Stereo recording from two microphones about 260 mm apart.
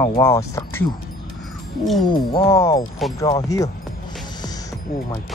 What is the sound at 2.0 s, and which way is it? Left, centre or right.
Speech, centre.